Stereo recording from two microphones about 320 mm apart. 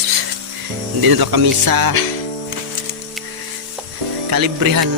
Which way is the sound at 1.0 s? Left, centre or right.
Right.